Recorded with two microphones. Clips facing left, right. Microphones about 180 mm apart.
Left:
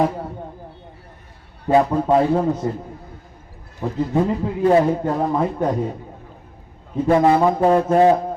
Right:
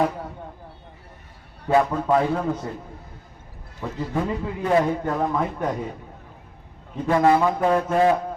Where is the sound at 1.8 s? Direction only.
30° left (ahead or behind).